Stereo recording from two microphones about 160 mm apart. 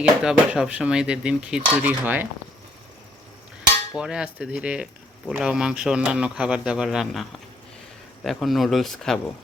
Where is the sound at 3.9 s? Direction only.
5° right (ahead or behind).